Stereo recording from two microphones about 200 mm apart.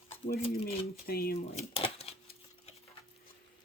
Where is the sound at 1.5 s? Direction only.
30° left (ahead or behind).